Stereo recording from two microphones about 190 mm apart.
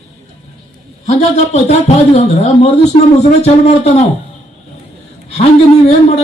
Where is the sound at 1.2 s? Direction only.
35° left (ahead or behind).